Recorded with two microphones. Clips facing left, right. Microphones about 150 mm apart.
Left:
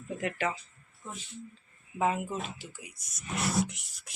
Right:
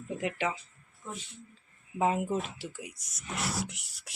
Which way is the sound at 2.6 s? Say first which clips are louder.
Right 6 dB; 75° right (ahead or behind).